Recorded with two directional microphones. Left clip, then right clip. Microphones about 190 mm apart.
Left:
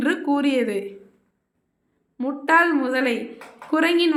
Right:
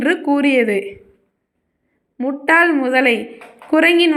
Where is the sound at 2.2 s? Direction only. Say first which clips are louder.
Right 4 dB; 20° right (ahead or behind).